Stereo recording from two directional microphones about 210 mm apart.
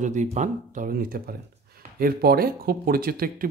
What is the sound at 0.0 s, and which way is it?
Speech, 35° right (ahead or behind).